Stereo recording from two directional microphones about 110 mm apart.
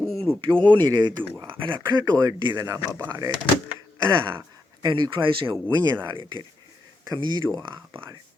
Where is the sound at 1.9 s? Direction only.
40° right (ahead or behind).